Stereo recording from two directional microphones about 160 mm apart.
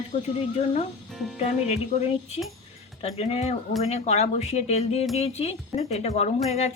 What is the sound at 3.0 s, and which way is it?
Speech, 40° left (ahead or behind).